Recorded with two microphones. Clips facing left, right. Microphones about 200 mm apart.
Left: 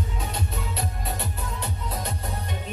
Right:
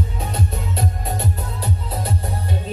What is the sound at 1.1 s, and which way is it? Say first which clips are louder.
Music: right 6 dB; 35° right (ahead or behind).